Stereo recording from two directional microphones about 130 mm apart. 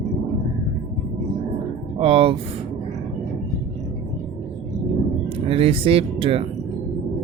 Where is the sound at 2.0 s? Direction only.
45° right (ahead or behind).